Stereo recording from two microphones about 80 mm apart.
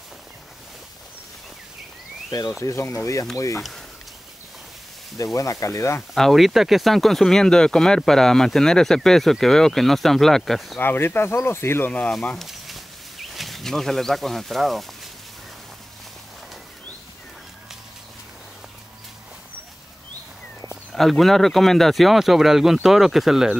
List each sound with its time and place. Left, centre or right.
2.6 s speech: left
5.1 s speech: left
6.1 s speech: centre
10.8 s speech: left
12.1 s speech: centre
12.4 s a sound: centre
20.9 s speech: centre